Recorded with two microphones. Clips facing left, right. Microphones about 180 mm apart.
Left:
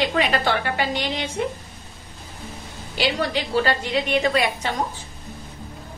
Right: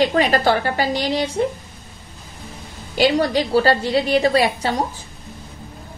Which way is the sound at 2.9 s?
40° right (ahead or behind).